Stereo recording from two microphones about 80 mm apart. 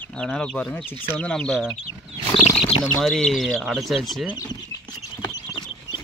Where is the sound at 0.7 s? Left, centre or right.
Left.